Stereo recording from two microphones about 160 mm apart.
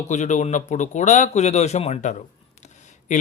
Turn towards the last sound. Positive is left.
turn(degrees=50)  # may be behind; listen again after turning